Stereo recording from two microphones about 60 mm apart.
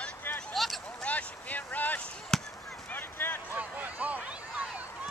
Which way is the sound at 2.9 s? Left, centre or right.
Left.